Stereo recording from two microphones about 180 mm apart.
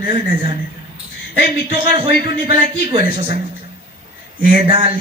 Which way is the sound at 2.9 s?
30° right (ahead or behind).